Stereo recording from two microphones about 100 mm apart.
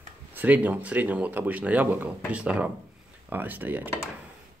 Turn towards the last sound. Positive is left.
turn(degrees=-15)  # may be behind; listen again after turning